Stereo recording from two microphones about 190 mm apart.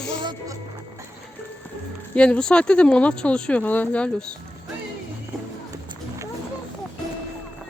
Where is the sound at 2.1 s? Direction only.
5° left (ahead or behind).